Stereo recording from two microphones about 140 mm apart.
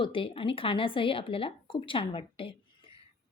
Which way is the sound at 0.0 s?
40° left (ahead or behind).